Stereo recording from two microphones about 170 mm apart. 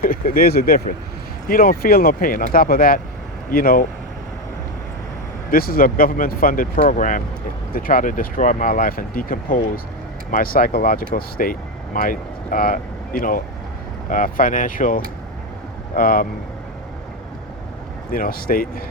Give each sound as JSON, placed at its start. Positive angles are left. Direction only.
{"t": 0.0, "sound": "speech", "side_deg": 55}
{"t": 5.5, "sound": "speech", "side_deg": 60}
{"t": 18.1, "sound": "speech", "side_deg": 60}